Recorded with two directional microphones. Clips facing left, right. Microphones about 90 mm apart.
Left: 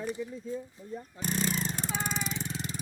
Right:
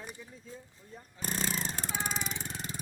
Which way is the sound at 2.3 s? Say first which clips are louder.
Left 4 dB; 45° right (ahead or behind).